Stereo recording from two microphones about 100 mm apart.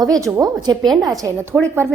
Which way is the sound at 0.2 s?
30° right (ahead or behind).